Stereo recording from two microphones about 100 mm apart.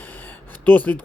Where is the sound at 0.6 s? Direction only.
15° left (ahead or behind).